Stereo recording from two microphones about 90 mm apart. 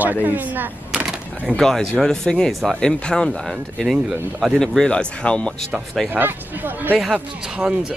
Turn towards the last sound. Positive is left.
turn(degrees=-10)  # may be behind; listen again after turning